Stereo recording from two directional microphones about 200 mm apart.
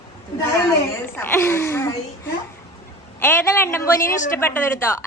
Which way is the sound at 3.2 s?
10° left (ahead or behind).